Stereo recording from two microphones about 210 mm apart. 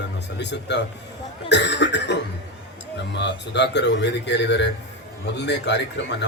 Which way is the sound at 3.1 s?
55° left (ahead or behind).